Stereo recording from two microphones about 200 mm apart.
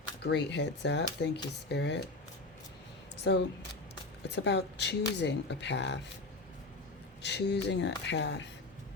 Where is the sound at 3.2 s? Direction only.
60° left (ahead or behind).